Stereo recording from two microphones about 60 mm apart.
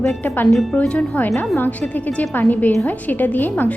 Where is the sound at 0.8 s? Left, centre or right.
Centre.